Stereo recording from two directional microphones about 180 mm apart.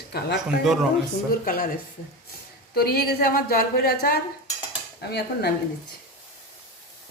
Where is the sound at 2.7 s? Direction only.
60° left (ahead or behind).